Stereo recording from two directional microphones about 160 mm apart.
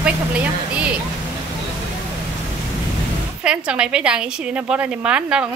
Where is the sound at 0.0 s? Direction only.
10° right (ahead or behind).